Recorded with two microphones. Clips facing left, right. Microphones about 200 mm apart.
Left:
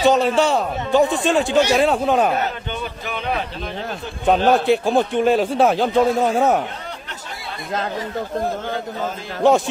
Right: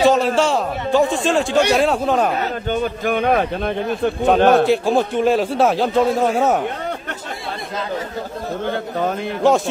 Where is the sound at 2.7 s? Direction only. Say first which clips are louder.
Right 8 dB; 50° right (ahead or behind).